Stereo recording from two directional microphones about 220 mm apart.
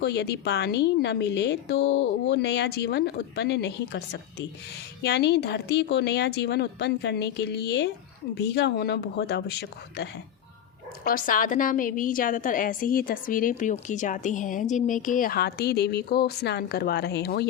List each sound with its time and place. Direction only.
0.0 s a woman's voice: 50° left (ahead or behind)